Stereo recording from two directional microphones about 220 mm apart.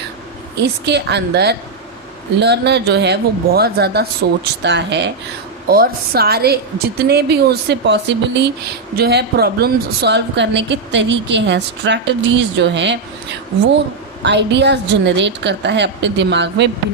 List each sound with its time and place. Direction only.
0.5 s a woman's voice: 50° right (ahead or behind)